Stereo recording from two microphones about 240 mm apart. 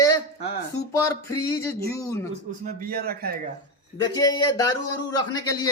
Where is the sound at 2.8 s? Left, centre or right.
Right.